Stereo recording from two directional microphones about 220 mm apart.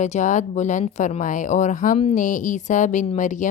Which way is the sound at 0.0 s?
35° left (ahead or behind).